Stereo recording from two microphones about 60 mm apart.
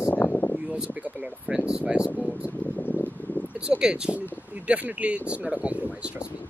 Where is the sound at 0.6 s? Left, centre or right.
Centre.